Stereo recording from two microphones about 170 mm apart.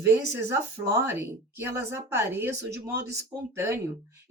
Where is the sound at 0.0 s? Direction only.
15° right (ahead or behind).